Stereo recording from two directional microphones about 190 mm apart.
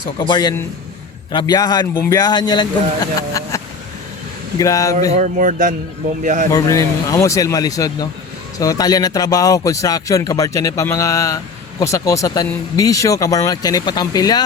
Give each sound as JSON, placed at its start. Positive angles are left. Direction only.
{"t": 0.3, "sound": "a man's voice", "side_deg": 20}
{"t": 5.1, "sound": "a man's voice", "side_deg": -40}
{"t": 6.5, "sound": "a man's voice", "side_deg": 15}